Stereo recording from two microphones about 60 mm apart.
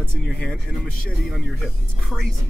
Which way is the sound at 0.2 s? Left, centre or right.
Left.